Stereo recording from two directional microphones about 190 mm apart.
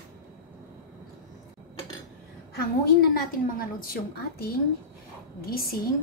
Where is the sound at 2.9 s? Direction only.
50° left (ahead or behind).